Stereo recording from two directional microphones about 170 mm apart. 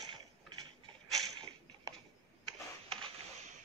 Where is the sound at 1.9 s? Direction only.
20° right (ahead or behind).